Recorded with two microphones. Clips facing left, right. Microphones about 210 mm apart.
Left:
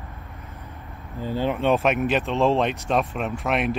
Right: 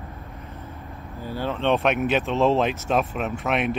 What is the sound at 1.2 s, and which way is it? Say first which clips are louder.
Speech: left 4 dB; 15° left (ahead or behind).